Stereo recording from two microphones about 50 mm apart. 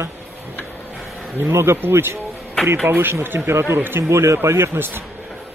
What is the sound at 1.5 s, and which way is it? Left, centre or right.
Speech, right.